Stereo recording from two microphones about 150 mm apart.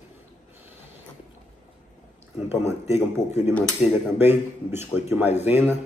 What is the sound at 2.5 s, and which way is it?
Speech, 15° right (ahead or behind).